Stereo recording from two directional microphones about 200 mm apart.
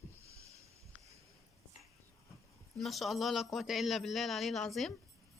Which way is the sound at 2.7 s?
Centre (ahead or behind).